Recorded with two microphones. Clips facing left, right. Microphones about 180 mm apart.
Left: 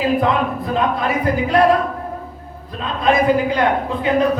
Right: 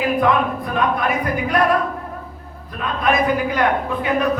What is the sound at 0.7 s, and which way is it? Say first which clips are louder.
Speech: left 1 dB; 25° left (ahead or behind).